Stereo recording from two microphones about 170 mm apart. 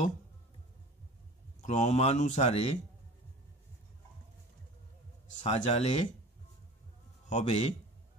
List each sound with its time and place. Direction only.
1.6 s speech: 45° left (ahead or behind)
5.4 s speech: 40° left (ahead or behind)
7.3 s speech: 40° left (ahead or behind)